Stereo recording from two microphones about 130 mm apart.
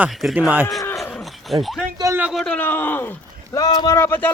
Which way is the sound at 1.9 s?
25° right (ahead or behind).